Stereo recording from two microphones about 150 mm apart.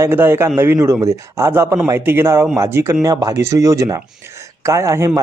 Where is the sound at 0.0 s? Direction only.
15° right (ahead or behind).